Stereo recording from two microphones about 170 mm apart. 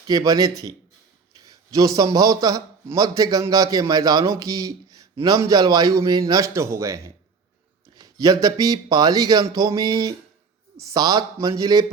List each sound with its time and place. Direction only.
0.1 s a man's voice: 20° right (ahead or behind)